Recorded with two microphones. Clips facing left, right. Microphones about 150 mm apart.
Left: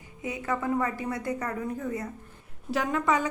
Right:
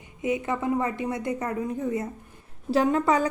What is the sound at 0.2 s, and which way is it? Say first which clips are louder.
A woman's voice: right 4 dB; 20° right (ahead or behind).